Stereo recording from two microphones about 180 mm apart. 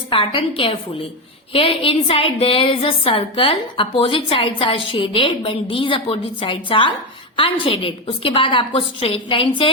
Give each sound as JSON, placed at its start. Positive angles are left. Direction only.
{"t": 0.1, "sound": "a woman's voice", "side_deg": 30}